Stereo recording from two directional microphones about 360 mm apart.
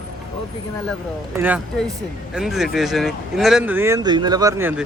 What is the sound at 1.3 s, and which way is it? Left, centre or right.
Speech, centre.